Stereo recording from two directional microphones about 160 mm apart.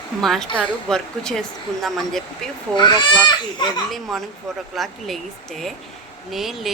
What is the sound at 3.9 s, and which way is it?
Speech, centre (ahead or behind).